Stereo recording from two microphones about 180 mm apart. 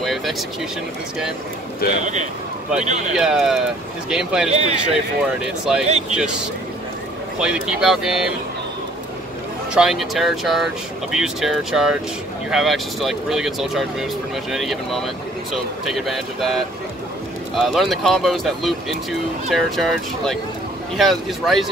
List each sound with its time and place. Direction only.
0.0 s vehicle: centre (ahead or behind)
1.8 s a man's voice: 55° left (ahead or behind)
2.8 s speech: 40° right (ahead or behind)
3.2 s speech: 5° right (ahead or behind)
4.5 s speech: 35° right (ahead or behind)
5.9 s speech: 40° right (ahead or behind)
7.3 s speech: 5° right (ahead or behind)
9.8 s speech: centre (ahead or behind)